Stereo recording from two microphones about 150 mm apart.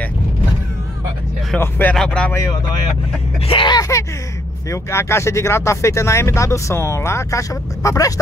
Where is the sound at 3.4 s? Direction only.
35° left (ahead or behind).